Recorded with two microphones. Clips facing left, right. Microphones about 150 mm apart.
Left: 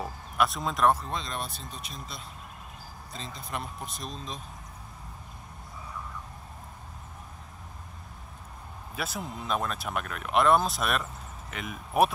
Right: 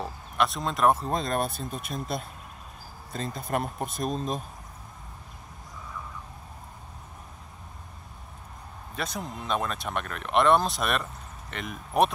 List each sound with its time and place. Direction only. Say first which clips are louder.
0.0 s a sound: right 1 dB; centre (ahead or behind)
1.1 s speech: right 7 dB; 50° right (ahead or behind)
8.9 s speech: right 1 dB; 5° left (ahead or behind)